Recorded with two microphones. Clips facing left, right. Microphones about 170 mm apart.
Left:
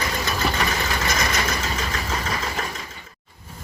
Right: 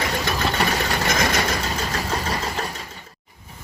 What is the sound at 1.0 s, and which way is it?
Vehicle, 50° right (ahead or behind).